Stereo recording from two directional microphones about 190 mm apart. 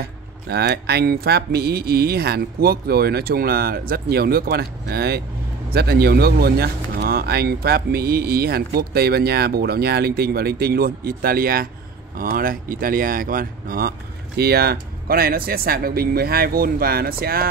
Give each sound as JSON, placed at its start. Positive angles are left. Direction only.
{"t": 0.0, "sound": "speech", "side_deg": -55}